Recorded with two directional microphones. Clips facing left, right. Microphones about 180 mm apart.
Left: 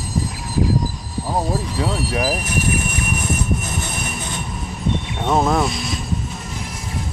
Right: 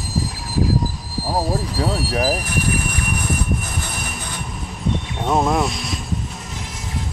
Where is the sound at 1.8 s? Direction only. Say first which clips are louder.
Right 1 dB; 35° right (ahead or behind).